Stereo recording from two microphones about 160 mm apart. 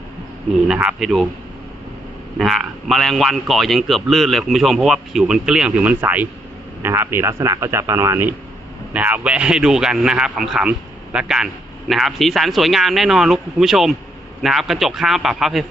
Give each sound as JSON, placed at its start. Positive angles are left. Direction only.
{"t": 0.7, "sound": "a man's voice", "side_deg": -5}
{"t": 2.4, "sound": "a man's voice", "side_deg": 0}